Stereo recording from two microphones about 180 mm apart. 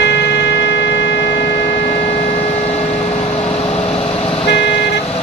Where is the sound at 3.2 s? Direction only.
35° left (ahead or behind).